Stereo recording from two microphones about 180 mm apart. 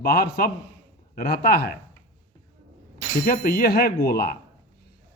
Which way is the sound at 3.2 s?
55° left (ahead or behind).